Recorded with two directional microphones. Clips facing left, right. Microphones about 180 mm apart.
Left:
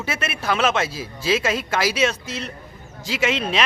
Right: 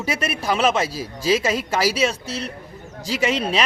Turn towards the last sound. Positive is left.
turn(degrees=-35)  # may be behind; listen again after turning